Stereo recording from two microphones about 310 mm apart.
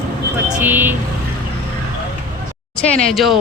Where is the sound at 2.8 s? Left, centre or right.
Centre.